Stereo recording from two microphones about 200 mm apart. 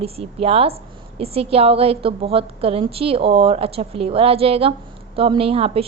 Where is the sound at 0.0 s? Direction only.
30° right (ahead or behind).